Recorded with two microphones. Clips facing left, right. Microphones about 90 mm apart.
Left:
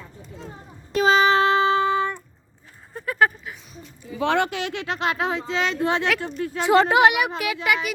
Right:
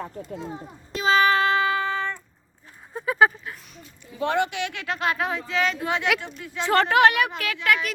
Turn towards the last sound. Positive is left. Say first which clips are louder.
# left 1 dB
turn(degrees=10)  # may be behind; listen again after turning